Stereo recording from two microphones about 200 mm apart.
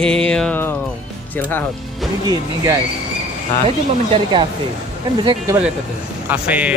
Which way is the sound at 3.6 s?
25° right (ahead or behind).